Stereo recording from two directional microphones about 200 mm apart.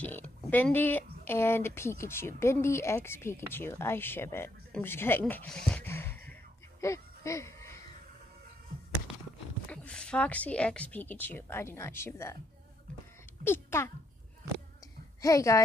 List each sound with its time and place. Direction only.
0.0 s speech: 10° left (ahead or behind)
6.8 s a sound: 15° left (ahead or behind)
9.7 s speech: 5° left (ahead or behind)
13.4 s speech: 10° left (ahead or behind)
15.2 s speech: 15° left (ahead or behind)